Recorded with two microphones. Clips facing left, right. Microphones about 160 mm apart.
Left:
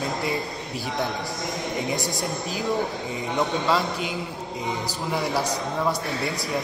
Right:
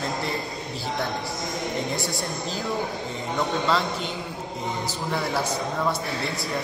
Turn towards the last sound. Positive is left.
turn(degrees=10)  # may be behind; listen again after turning